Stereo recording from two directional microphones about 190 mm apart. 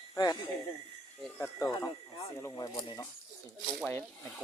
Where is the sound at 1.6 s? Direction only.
20° left (ahead or behind).